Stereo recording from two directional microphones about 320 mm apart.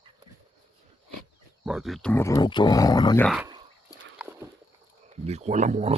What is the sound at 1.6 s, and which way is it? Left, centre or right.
Speech, centre.